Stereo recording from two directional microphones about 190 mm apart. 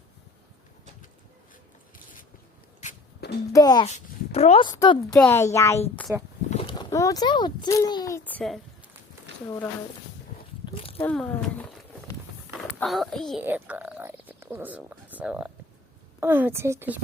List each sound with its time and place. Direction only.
2.8 s a sound: 40° left (ahead or behind)
3.5 s a child's voice: 20° left (ahead or behind)
3.8 s speech: 35° left (ahead or behind)
4.7 s a child's voice: 20° left (ahead or behind)
6.1 s speech: 15° right (ahead or behind)
6.5 s a child's voice: 25° left (ahead or behind); by 8.6 s 5° left (ahead or behind)
9.3 s a sound: 65° right (ahead or behind)
10.7 s a sound: 30° left (ahead or behind)
11.0 s speech: 10° left (ahead or behind)
12.8 s a child's voice: centre (ahead or behind)
13.4 s a sound: 10° right (ahead or behind)
16.2 s speech: 10° right (ahead or behind)